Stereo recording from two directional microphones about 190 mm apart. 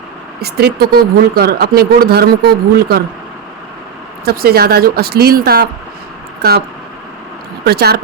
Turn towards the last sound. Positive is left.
turn(degrees=-55)  # may be behind; listen again after turning